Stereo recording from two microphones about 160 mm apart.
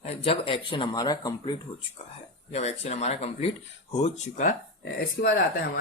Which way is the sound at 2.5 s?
45° left (ahead or behind).